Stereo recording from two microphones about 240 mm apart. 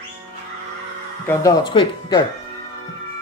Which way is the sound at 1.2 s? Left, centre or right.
Centre.